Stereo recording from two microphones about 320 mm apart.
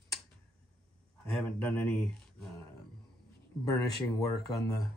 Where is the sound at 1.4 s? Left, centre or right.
Centre.